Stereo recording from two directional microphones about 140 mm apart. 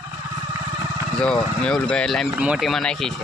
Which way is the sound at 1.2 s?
5° left (ahead or behind).